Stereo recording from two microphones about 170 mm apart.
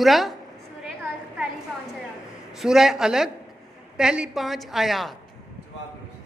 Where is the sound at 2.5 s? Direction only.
Centre (ahead or behind).